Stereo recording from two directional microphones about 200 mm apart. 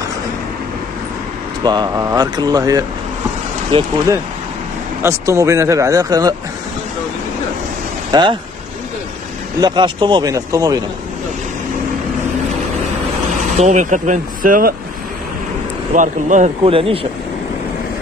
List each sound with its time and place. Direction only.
1.6 s speech: 20° right (ahead or behind)
5.0 s speech: 15° right (ahead or behind)
8.1 s speech: 25° right (ahead or behind)
9.6 s speech: 20° right (ahead or behind)
13.6 s speech: 35° right (ahead or behind)
15.9 s speech: 40° right (ahead or behind)